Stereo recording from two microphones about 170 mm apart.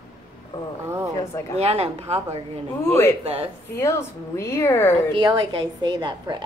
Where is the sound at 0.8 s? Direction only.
15° right (ahead or behind).